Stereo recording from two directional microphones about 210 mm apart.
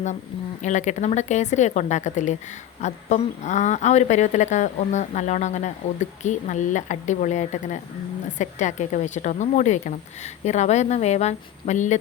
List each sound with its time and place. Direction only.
0.6 s a woman's voice: 35° left (ahead or behind)